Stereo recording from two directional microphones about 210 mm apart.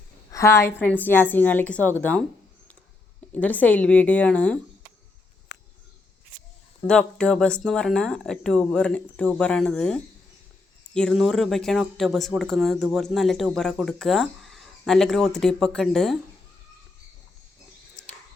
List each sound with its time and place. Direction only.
0.3 s a woman's voice: 15° left (ahead or behind)
3.3 s a woman's voice: 5° left (ahead or behind)
5.5 s a sound: 55° left (ahead or behind)
6.8 s speech: 5° left (ahead or behind)